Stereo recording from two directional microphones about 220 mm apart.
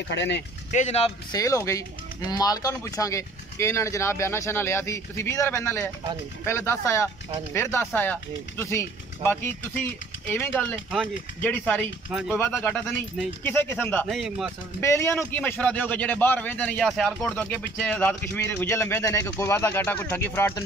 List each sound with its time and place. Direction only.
0.1 s speech: 55° left (ahead or behind)
0.7 s speech: 30° left (ahead or behind)
1.3 s speech: 15° left (ahead or behind); by 12.4 s 5° right (ahead or behind)
12.4 s speech: 10° left (ahead or behind)
14.8 s speech: 15° left (ahead or behind)